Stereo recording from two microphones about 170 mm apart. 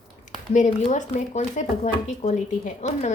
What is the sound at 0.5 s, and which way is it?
Speech, 45° left (ahead or behind).